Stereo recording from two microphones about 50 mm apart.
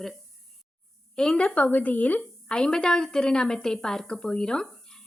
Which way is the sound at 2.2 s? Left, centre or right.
Centre.